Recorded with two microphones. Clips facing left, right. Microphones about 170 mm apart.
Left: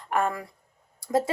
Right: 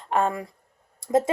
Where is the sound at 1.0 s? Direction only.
20° right (ahead or behind).